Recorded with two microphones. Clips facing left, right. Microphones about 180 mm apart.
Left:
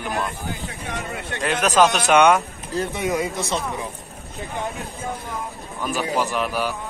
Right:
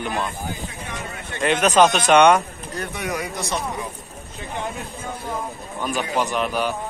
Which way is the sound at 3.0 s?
20° left (ahead or behind).